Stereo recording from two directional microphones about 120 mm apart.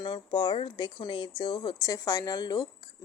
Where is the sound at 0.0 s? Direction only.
40° left (ahead or behind).